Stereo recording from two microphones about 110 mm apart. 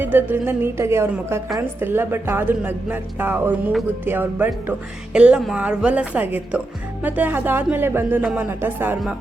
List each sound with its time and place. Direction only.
0.0 s a woman's voice: 15° right (ahead or behind)